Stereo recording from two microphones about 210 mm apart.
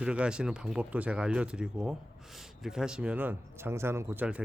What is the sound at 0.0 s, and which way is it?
Speech, 5° right (ahead or behind).